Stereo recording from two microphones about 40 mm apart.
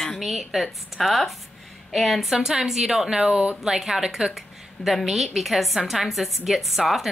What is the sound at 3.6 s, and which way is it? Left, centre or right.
A woman's voice, centre.